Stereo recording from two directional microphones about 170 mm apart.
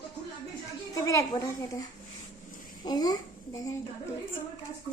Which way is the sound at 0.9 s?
20° left (ahead or behind).